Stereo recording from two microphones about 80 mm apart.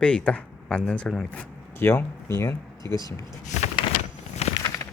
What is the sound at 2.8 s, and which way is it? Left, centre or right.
Speech, right.